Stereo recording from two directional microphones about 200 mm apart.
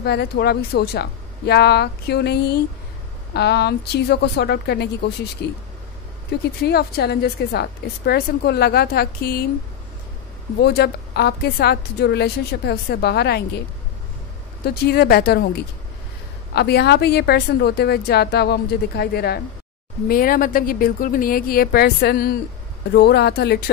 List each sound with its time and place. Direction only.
0.0 s a woman's voice: 55° left (ahead or behind)
6.6 s a woman's voice: 55° left (ahead or behind)
10.6 s a woman's voice: 55° left (ahead or behind)
14.6 s a woman's voice: 50° left (ahead or behind)